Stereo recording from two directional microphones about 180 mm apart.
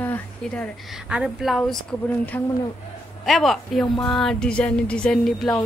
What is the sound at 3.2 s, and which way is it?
A woman's voice, centre (ahead or behind).